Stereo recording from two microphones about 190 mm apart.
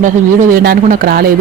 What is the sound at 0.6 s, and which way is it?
Speech, 50° right (ahead or behind).